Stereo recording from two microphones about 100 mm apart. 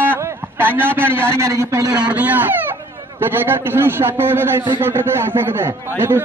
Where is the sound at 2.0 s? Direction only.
15° right (ahead or behind).